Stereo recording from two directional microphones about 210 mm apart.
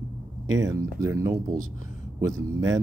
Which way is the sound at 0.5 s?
15° right (ahead or behind).